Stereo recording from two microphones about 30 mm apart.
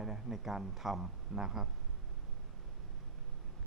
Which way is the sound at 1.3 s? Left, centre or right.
Centre.